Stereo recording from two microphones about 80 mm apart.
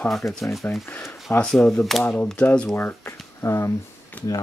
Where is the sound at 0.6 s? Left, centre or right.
Left.